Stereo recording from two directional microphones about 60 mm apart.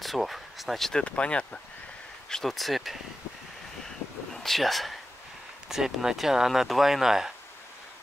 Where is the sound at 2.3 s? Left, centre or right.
Centre.